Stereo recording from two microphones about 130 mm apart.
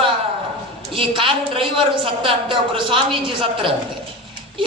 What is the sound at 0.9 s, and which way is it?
A woman's voice, 40° right (ahead or behind).